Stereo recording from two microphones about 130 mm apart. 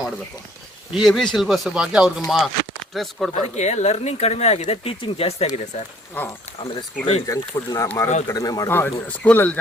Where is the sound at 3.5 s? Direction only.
60° left (ahead or behind).